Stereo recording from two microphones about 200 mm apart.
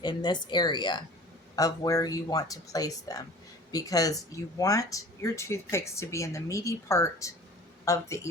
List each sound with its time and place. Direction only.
0.0 s speech: 20° left (ahead or behind)